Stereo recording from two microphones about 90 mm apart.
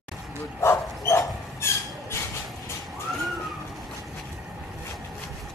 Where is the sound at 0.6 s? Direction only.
30° left (ahead or behind).